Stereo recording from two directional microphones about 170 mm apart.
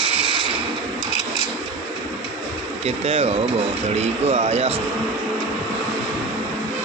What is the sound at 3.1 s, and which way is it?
A man's voice, 35° right (ahead or behind).